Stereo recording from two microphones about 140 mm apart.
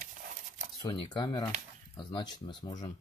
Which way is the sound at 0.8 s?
30° left (ahead or behind).